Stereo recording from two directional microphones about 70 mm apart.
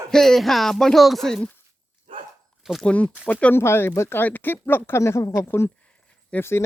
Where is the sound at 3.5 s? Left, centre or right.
Left.